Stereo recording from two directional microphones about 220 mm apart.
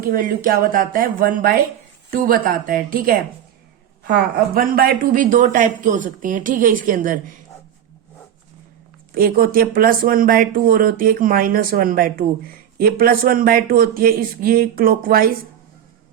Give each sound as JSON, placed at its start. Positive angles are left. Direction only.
{"t": 0.0, "sound": "speech", "side_deg": -40}
{"t": 4.5, "sound": "speech", "side_deg": -40}
{"t": 9.1, "sound": "speech", "side_deg": -40}